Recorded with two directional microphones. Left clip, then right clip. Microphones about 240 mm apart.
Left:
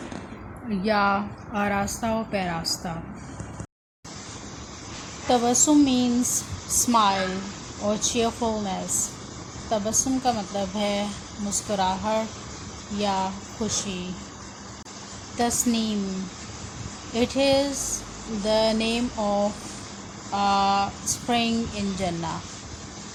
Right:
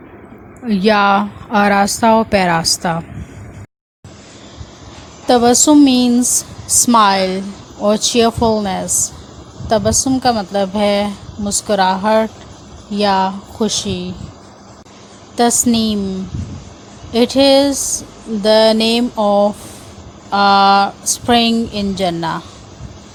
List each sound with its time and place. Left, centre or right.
0.7 s a woman's voice: right
5.3 s a woman's voice: right
15.4 s a woman's voice: right
17.2 s a woman's voice: right